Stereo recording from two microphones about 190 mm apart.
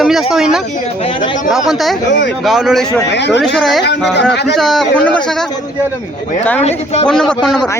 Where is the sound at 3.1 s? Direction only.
65° left (ahead or behind).